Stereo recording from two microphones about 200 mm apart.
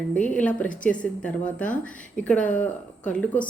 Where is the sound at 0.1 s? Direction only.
5° left (ahead or behind).